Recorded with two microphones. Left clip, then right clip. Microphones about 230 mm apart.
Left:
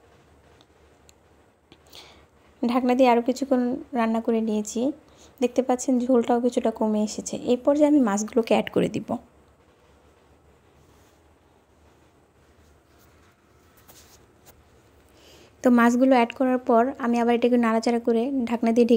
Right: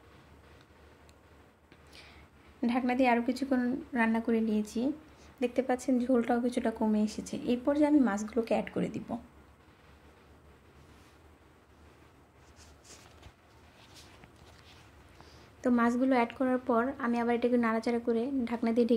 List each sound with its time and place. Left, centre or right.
1.9 s a sound: left
2.6 s a woman's voice: left
15.2 s a woman's voice: left